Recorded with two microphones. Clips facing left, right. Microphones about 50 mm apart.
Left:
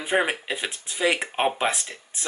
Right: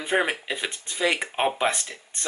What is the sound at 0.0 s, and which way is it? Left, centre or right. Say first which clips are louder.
A man's voice: left 1 dB; centre.